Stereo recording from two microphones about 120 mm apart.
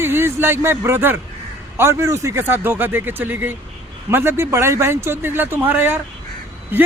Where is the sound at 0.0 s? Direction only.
20° right (ahead or behind).